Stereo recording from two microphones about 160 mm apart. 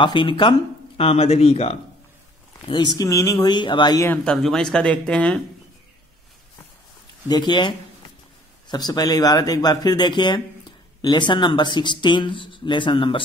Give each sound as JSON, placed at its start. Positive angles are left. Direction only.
{"t": 0.0, "sound": "speech", "side_deg": 30}
{"t": 3.0, "sound": "speech", "side_deg": 20}
{"t": 4.1, "sound": "speech", "side_deg": 5}
{"t": 7.2, "sound": "speech", "side_deg": 25}